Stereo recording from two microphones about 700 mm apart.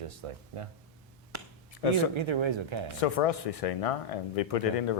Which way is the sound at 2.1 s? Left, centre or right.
Right.